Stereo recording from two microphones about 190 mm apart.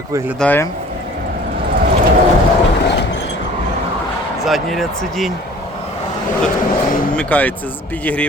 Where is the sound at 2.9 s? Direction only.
65° left (ahead or behind).